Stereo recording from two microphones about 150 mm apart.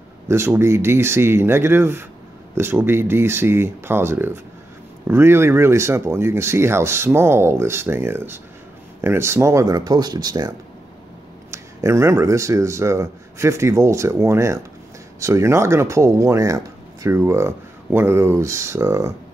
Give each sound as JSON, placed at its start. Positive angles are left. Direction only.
{"t": 0.3, "sound": "speech", "side_deg": -15}
{"t": 11.5, "sound": "speech", "side_deg": -20}